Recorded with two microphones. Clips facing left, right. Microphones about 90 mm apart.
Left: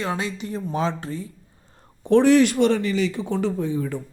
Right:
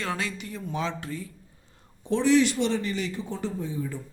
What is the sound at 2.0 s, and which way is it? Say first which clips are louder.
Speech: left 6 dB; 60° left (ahead or behind).